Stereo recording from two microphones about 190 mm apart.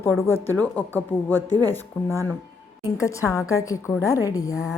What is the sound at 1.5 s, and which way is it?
Speech, 20° right (ahead or behind).